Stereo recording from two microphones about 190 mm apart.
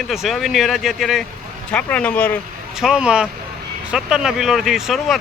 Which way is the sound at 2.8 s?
5° right (ahead or behind).